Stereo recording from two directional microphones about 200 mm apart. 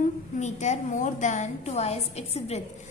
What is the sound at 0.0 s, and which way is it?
A woman's voice, 35° left (ahead or behind).